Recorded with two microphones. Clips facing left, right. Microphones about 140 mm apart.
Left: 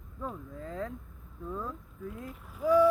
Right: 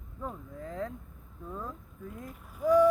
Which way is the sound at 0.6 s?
20° right (ahead or behind).